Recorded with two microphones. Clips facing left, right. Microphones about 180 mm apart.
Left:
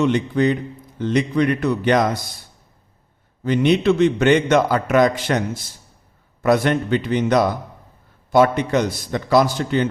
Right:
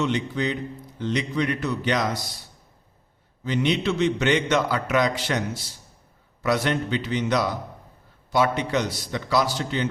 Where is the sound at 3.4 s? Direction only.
50° left (ahead or behind).